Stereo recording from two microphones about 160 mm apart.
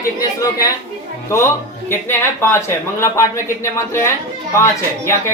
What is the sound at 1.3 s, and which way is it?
Speech, 15° left (ahead or behind).